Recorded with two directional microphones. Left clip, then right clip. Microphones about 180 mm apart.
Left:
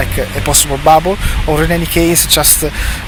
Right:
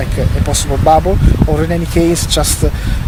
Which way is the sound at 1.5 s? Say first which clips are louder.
Left 4 dB; 15° right (ahead or behind).